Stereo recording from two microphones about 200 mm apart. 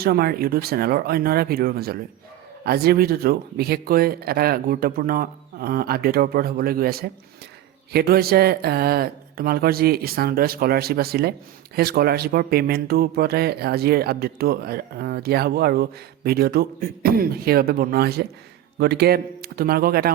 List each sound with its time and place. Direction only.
0.0 s speech: 50° right (ahead or behind)